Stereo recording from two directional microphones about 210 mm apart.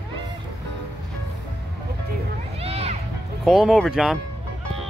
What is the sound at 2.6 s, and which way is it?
Music, 30° right (ahead or behind).